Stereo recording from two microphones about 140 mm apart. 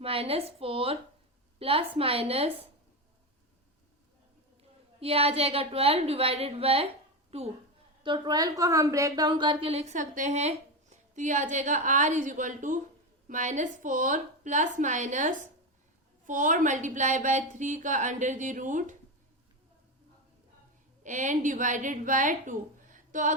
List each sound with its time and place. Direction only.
0.0 s a woman's voice: 45° right (ahead or behind)
4.9 s a woman's voice: 45° right (ahead or behind)
8.0 s a woman's voice: 35° right (ahead or behind); by 18.9 s 65° right (ahead or behind)
21.0 s a woman's voice: 60° right (ahead or behind)